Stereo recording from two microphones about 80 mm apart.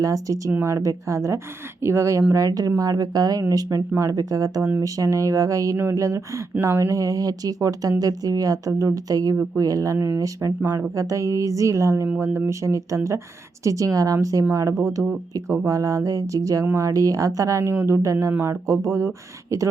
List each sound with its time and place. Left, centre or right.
0.0 s a woman's voice: right
2.3 s a woman's voice: right
10.6 s speech: right
10.9 s a woman's voice: right